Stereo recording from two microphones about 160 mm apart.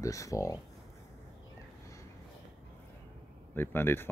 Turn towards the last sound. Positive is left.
turn(degrees=15)  # may be behind; listen again after turning